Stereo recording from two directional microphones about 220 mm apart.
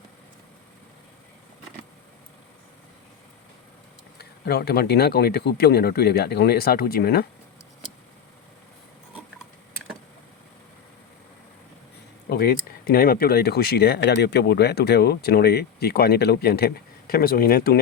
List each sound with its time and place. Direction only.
4.2 s speech: 45° left (ahead or behind)
12.3 s speech: 45° left (ahead or behind)